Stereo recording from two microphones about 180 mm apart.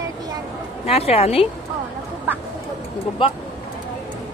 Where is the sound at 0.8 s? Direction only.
35° left (ahead or behind).